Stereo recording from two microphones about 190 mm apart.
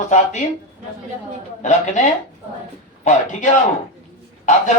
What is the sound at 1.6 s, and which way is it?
A man's voice, 40° left (ahead or behind).